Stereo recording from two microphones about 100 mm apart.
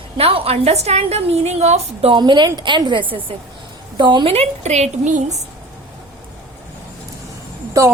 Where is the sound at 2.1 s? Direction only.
50° right (ahead or behind).